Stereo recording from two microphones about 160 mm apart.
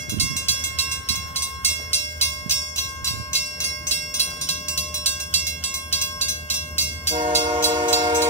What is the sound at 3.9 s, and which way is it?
Train, 40° left (ahead or behind).